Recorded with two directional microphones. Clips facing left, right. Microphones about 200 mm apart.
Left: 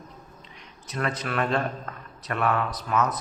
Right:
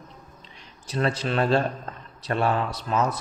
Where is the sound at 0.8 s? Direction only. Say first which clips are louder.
Right 4 dB; 30° right (ahead or behind).